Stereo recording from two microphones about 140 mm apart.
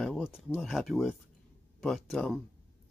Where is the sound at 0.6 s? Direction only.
5° right (ahead or behind).